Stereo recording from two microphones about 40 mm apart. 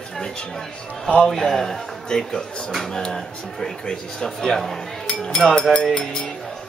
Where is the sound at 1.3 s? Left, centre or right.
Centre.